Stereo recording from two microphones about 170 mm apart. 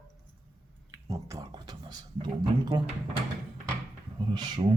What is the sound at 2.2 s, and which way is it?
Speech, 25° right (ahead or behind).